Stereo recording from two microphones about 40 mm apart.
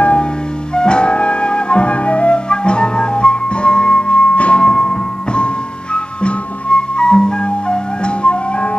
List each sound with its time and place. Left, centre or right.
0.0 s music: left
0.7 s flute: left
6.2 s music: left